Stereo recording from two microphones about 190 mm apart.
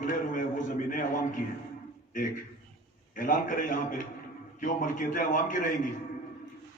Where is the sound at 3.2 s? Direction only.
45° left (ahead or behind).